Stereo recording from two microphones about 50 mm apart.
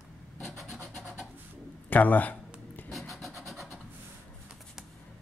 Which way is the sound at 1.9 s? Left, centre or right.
Left.